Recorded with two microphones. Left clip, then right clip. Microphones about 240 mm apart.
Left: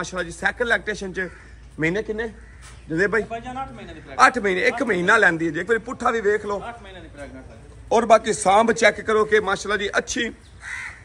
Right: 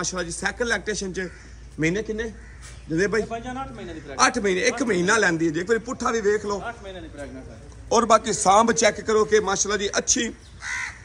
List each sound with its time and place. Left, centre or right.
0.0 s a man's voice: centre
3.3 s a man's voice: left
4.2 s a man's voice: centre
7.9 s a man's voice: centre